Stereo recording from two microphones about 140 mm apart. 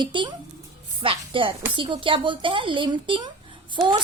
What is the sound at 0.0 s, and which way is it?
Speech, 35° right (ahead or behind).